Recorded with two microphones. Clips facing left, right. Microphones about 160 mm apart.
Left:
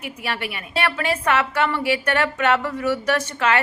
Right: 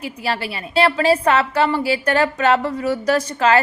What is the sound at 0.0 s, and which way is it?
A woman's voice, 30° right (ahead or behind).